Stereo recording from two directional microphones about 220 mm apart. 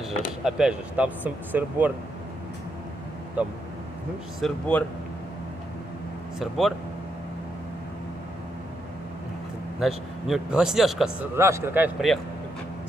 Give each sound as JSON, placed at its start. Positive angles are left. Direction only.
{"t": 0.4, "sound": "speech", "side_deg": -5}
{"t": 3.4, "sound": "speech", "side_deg": -5}
{"t": 4.4, "sound": "a man's voice", "side_deg": 5}
{"t": 6.4, "sound": "a man's voice", "side_deg": 0}
{"t": 9.8, "sound": "a man's voice", "side_deg": 0}
{"t": 11.3, "sound": "speech", "side_deg": -10}